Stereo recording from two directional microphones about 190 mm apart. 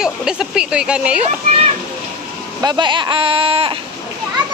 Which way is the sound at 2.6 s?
25° right (ahead or behind).